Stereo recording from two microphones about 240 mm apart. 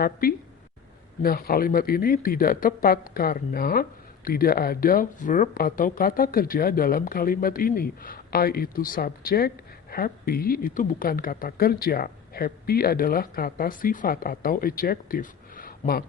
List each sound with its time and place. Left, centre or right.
0.0 s speech: left